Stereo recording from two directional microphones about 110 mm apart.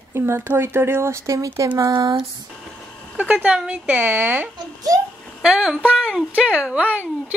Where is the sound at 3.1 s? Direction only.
10° right (ahead or behind).